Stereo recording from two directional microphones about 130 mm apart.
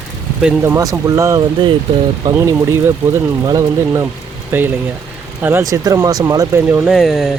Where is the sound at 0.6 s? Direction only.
25° right (ahead or behind).